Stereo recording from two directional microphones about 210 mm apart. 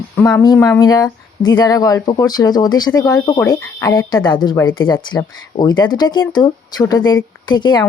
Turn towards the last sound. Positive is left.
turn(degrees=20)  # may be behind; listen again after turning